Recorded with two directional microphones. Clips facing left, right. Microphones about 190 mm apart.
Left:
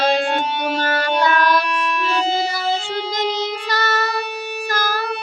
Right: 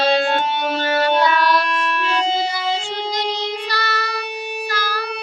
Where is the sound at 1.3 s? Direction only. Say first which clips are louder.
Even; 45° left (ahead or behind).